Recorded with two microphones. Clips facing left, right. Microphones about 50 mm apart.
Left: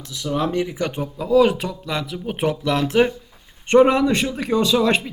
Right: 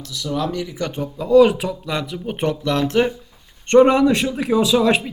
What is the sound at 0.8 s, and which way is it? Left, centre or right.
Speech, centre.